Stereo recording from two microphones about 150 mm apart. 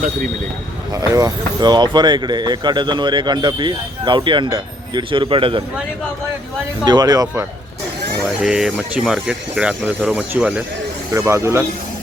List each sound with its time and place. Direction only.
1.1 s speech: 25° right (ahead or behind)
6.8 s speech: 25° right (ahead or behind)
8.2 s speech: 5° right (ahead or behind)